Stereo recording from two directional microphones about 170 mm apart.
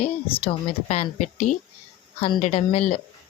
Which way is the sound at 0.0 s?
35° left (ahead or behind).